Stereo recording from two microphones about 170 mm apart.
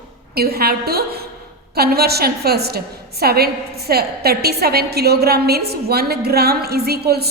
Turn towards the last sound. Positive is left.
turn(degrees=-65)  # may be behind; listen again after turning